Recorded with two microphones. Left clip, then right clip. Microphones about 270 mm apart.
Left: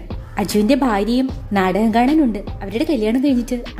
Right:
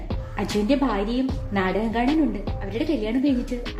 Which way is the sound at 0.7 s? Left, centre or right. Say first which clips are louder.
Left 6 dB; left.